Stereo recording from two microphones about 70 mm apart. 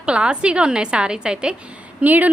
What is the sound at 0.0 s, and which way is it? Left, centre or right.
A woman's voice, centre.